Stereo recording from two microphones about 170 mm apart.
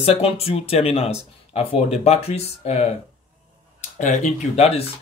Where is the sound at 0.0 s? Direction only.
35° left (ahead or behind).